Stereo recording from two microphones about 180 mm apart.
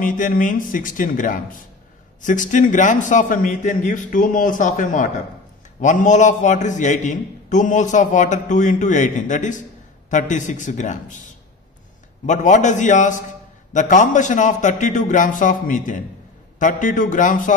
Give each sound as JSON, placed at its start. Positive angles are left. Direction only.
{"t": 0.0, "sound": "a man's voice", "side_deg": 45}